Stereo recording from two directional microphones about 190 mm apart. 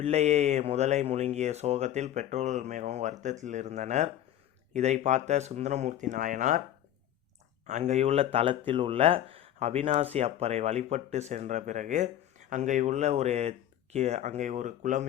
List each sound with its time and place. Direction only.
0.0 s speech: 35° right (ahead or behind)
7.7 s speech: 40° right (ahead or behind)